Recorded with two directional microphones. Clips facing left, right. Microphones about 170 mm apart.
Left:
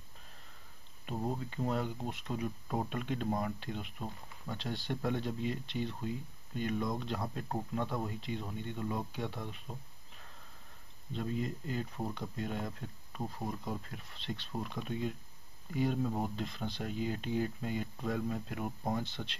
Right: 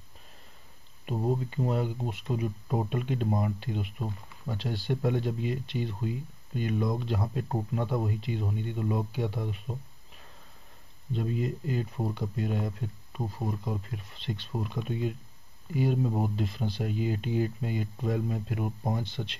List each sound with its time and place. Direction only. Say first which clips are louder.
1.0 s speech: right 7 dB; 15° right (ahead or behind)
11.1 s speech: right 5 dB; 10° right (ahead or behind)